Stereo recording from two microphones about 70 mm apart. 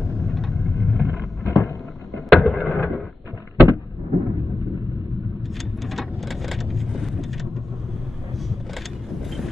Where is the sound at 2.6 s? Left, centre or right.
Left.